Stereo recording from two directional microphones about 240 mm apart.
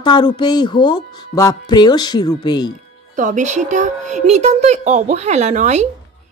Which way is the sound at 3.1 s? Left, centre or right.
Right.